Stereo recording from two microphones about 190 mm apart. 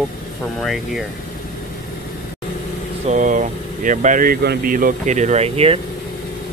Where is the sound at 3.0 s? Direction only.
40° right (ahead or behind).